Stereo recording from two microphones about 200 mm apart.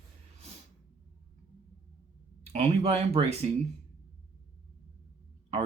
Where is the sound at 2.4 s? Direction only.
30° right (ahead or behind).